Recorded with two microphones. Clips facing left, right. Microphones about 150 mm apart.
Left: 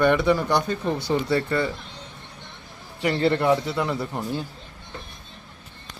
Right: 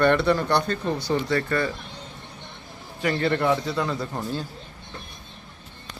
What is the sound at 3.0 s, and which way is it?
Speech, 20° left (ahead or behind).